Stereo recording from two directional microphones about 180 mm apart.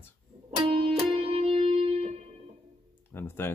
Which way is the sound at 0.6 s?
35° right (ahead or behind).